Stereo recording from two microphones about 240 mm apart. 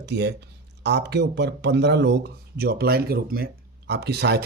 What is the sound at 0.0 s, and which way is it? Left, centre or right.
Speech, right.